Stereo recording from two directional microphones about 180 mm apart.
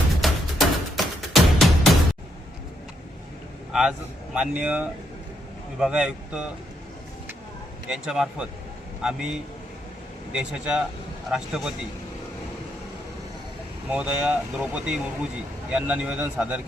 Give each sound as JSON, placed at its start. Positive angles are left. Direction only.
{"t": 0.2, "sound": "music", "side_deg": 0}
{"t": 3.7, "sound": "a sound", "side_deg": -5}
{"t": 4.4, "sound": "speech", "side_deg": -5}
{"t": 7.9, "sound": "speech", "side_deg": 0}
{"t": 13.9, "sound": "speech", "side_deg": -5}